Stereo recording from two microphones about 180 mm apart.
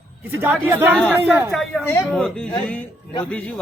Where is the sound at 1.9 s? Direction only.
5° left (ahead or behind).